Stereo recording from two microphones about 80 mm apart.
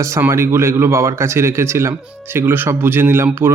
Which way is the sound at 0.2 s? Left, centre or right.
Right.